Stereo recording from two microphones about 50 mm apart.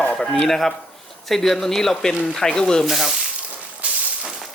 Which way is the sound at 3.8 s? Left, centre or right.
Right.